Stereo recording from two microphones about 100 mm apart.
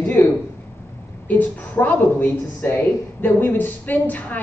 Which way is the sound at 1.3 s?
15° left (ahead or behind).